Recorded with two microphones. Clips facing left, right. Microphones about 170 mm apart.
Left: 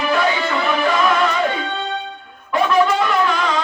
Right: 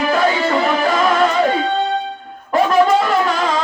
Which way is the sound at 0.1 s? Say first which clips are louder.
Right 2 dB; 40° right (ahead or behind).